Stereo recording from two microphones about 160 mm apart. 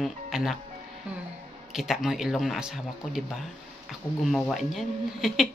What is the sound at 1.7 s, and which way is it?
Speech, centre (ahead or behind).